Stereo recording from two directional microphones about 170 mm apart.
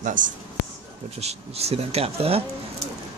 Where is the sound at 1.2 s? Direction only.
40° right (ahead or behind).